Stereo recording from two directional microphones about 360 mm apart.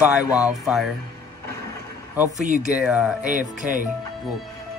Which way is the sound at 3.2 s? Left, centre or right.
Right.